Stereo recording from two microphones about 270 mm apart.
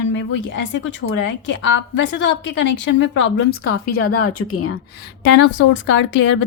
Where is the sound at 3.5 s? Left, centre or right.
Left.